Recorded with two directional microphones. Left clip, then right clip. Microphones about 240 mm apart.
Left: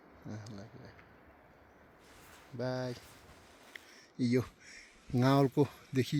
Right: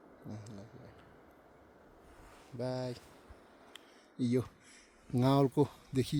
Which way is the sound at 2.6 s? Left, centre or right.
Centre.